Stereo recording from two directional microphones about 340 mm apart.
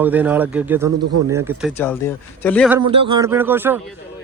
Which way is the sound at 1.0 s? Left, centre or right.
Right.